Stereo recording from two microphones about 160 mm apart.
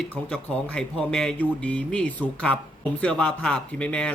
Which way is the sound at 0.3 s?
5° left (ahead or behind).